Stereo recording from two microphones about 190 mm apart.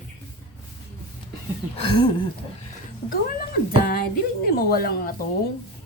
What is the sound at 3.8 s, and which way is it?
A woman's voice, 50° left (ahead or behind).